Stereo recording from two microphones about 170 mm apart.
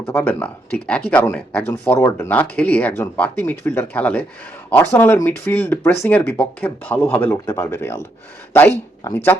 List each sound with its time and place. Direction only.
0.0 s speech: 10° left (ahead or behind)
9.0 s speech: 15° left (ahead or behind)